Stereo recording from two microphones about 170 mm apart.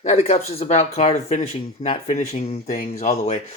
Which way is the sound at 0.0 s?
40° left (ahead or behind).